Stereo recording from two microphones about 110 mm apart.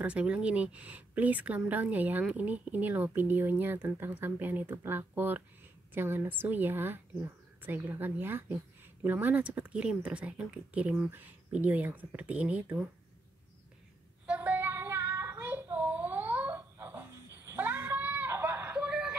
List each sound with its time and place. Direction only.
0.0 s a woman's voice: 10° right (ahead or behind)
14.2 s child singing: 15° right (ahead or behind)
16.7 s a sound: 20° right (ahead or behind)